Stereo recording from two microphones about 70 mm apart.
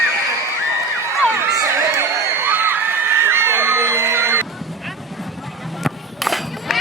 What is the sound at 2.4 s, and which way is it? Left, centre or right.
Crowd, right.